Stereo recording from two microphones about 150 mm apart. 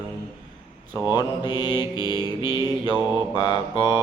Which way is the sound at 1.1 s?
25° left (ahead or behind).